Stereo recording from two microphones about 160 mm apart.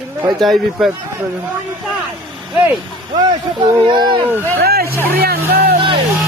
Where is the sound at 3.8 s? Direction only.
30° right (ahead or behind).